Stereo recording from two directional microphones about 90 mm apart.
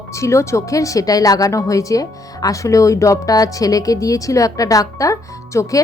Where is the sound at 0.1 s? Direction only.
35° left (ahead or behind).